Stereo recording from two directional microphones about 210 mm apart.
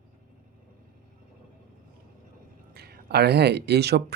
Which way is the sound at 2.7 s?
50° right (ahead or behind).